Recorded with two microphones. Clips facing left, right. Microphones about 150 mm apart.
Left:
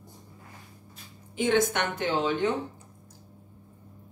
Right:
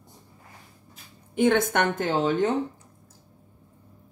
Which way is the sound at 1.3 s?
55° right (ahead or behind).